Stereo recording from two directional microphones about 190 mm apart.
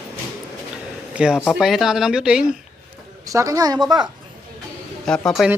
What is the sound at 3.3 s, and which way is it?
Speech, 15° right (ahead or behind).